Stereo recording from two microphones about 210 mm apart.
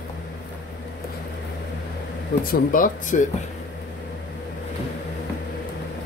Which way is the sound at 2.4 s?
45° left (ahead or behind).